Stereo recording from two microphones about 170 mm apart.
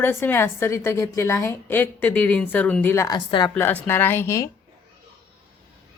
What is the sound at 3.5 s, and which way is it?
Speech, 10° left (ahead or behind).